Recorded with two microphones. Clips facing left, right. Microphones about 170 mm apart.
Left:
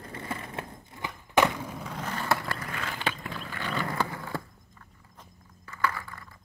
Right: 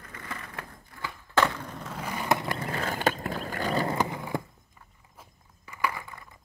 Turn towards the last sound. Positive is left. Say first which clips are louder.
# even
turn(degrees=-20)  # may be behind; listen again after turning